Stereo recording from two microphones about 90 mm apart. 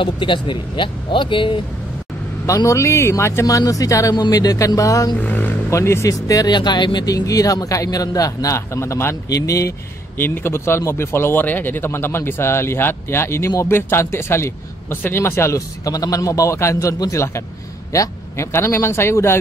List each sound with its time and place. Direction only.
0.0 s speech: 65° left (ahead or behind)
2.4 s speech: 35° left (ahead or behind)
5.2 s speech: 20° left (ahead or behind)
5.7 s speech: 30° left (ahead or behind)
10.1 s speech: 25° left (ahead or behind)